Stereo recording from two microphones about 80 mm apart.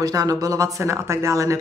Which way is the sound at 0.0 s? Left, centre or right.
Right.